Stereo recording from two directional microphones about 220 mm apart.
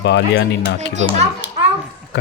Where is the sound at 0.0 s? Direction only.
50° left (ahead or behind).